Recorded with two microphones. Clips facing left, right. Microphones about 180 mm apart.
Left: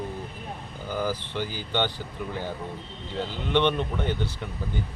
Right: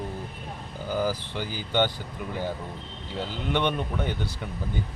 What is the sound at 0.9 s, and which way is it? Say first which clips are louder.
Speech: right 1 dB; 10° right (ahead or behind).